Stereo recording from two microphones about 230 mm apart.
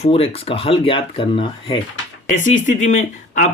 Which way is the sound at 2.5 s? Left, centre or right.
Left.